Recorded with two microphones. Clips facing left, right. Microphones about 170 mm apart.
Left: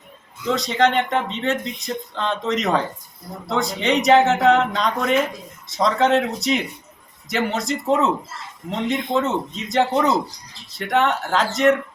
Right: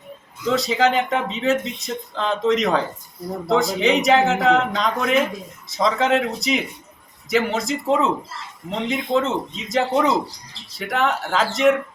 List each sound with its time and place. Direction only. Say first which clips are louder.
0.5 s speech: even; 5° right (ahead or behind)